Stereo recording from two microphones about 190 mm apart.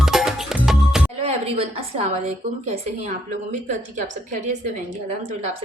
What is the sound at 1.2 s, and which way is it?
A woman's voice, 30° right (ahead or behind).